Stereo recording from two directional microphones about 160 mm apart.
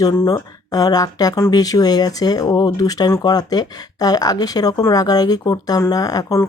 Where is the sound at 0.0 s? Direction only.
20° left (ahead or behind).